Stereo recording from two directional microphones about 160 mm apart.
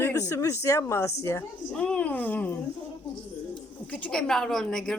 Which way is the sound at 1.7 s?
5° left (ahead or behind).